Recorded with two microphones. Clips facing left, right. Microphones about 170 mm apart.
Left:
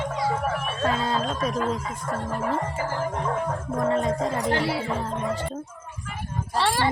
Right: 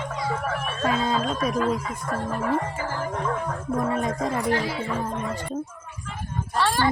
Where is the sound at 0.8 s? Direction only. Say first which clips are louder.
Right 1 dB; 10° right (ahead or behind).